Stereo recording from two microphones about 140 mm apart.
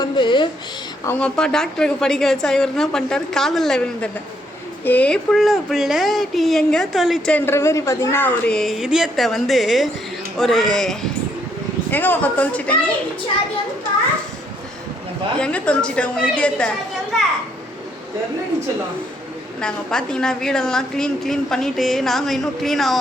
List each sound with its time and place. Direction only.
0.0 s a sound: 35° left (ahead or behind)
1.2 s a woman's voice: 5° left (ahead or behind)
7.3 s a woman's voice: 15° left (ahead or behind)
15.4 s a woman's voice: 5° left (ahead or behind)
19.6 s a woman's voice: 5° left (ahead or behind)